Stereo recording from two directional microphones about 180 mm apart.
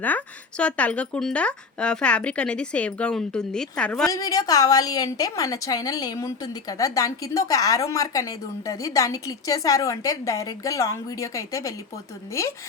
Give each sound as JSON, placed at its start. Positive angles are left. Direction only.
{"t": 0.0, "sound": "speech", "side_deg": 10}
{"t": 4.0, "sound": "a woman's voice", "side_deg": 20}